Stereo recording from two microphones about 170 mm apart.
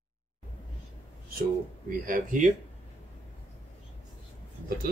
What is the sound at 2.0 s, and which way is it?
Speech, 55° right (ahead or behind).